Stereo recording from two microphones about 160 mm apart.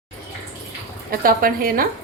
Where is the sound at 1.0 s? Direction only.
60° right (ahead or behind).